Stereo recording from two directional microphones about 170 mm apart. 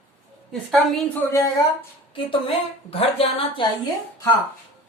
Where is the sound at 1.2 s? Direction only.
10° left (ahead or behind).